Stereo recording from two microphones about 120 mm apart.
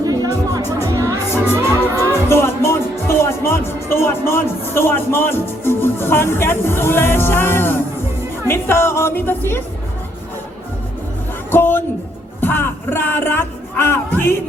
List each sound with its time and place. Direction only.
0.0 s music: 30° right (ahead or behind)
2.0 s music: 20° left (ahead or behind)
8.4 s a woman's voice: 20° left (ahead or behind)
11.5 s speech: 20° left (ahead or behind)
12.4 s music: 15° left (ahead or behind)